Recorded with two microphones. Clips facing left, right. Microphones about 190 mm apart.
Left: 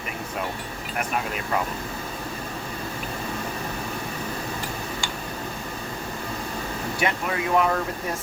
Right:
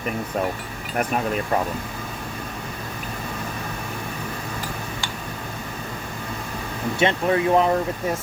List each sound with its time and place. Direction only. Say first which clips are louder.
7.0 s speech: right 7 dB; 30° right (ahead or behind)